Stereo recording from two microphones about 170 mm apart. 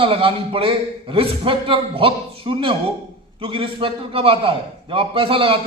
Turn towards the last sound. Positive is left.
turn(degrees=-30)  # may be behind; listen again after turning